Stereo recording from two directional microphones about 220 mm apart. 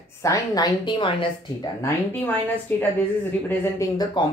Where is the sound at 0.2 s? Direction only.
15° left (ahead or behind).